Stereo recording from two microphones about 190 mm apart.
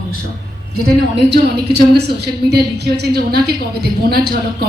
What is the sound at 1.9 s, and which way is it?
A woman's voice, 60° right (ahead or behind).